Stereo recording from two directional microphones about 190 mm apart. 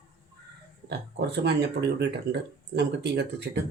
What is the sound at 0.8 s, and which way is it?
Speech, 60° right (ahead or behind).